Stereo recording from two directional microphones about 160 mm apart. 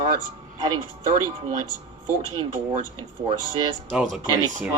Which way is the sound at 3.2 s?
35° right (ahead or behind).